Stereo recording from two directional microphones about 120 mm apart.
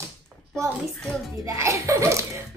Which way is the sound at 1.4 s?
25° right (ahead or behind).